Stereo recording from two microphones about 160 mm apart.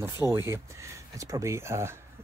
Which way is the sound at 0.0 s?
15° right (ahead or behind).